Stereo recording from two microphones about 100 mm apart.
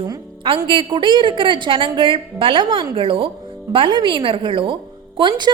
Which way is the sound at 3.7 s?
55° right (ahead or behind).